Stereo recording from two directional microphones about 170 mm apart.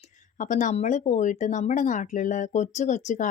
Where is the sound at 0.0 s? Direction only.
50° left (ahead or behind).